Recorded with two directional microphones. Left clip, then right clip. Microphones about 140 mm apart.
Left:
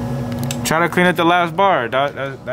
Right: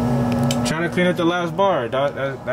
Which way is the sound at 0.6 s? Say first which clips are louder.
Left 9 dB; 25° left (ahead or behind).